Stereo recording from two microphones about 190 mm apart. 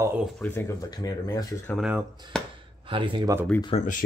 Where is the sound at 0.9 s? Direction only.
20° left (ahead or behind).